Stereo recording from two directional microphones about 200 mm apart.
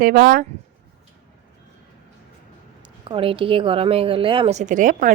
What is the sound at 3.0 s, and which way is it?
A woman's voice, 25° right (ahead or behind).